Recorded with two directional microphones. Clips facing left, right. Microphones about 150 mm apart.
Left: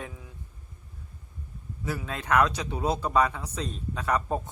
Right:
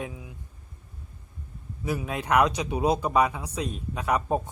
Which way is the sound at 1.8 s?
15° right (ahead or behind).